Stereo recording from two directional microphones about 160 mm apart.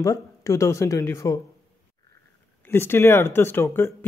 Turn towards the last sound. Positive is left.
turn(degrees=15)  # may be behind; listen again after turning